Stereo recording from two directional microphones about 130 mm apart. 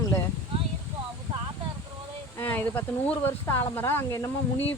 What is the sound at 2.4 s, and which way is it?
Speech, 15° left (ahead or behind).